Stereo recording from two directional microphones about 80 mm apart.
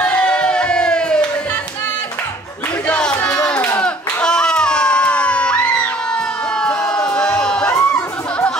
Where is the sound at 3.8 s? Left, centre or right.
Centre.